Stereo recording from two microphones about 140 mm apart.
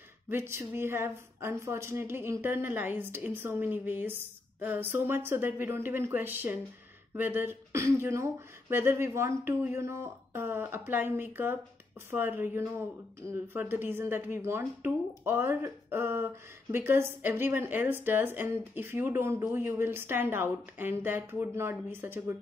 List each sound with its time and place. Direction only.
0.3 s a woman's voice: 15° right (ahead or behind)